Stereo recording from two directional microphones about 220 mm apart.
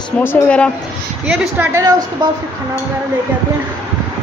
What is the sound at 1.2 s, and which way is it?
Speech, 5° right (ahead or behind).